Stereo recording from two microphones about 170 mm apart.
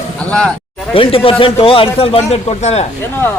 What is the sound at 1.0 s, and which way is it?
A man's voice, 30° left (ahead or behind).